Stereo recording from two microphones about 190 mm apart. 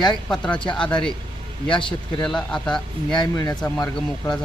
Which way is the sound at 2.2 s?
5° left (ahead or behind).